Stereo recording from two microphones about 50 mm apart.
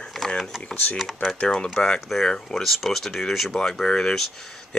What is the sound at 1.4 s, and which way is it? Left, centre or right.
Speech, left.